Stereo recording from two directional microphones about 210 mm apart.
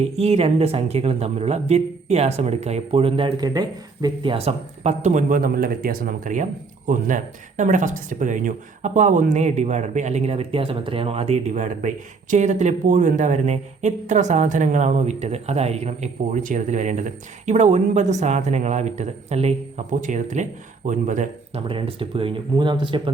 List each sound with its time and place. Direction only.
0.0 s speech: 30° right (ahead or behind)